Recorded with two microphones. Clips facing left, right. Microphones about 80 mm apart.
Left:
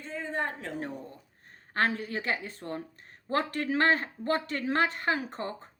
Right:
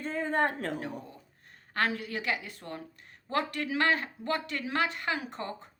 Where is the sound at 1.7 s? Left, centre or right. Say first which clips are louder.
Left 2 dB; left.